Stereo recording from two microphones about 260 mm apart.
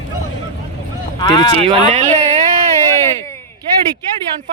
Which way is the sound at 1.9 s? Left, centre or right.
Right.